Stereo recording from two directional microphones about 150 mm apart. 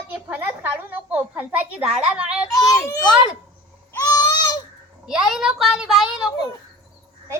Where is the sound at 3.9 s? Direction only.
25° left (ahead or behind).